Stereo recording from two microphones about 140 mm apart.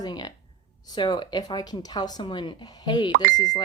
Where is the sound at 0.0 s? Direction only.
30° left (ahead or behind).